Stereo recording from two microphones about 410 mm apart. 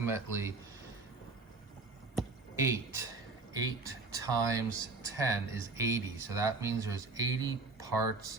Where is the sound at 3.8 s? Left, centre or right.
Centre.